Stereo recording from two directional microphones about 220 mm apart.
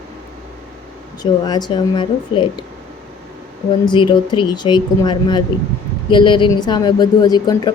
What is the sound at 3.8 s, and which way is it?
A woman's voice, 20° left (ahead or behind).